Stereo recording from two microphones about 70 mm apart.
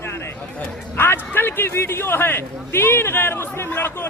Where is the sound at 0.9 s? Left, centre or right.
Left.